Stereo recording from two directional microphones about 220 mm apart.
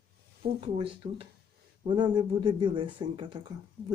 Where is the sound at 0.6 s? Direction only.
25° right (ahead or behind).